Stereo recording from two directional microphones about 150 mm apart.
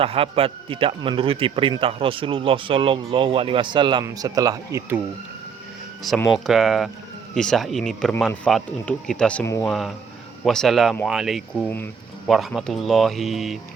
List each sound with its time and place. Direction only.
0.0 s a man's voice: 40° right (ahead or behind)
6.1 s speech: centre (ahead or behind)
12.3 s speech: centre (ahead or behind)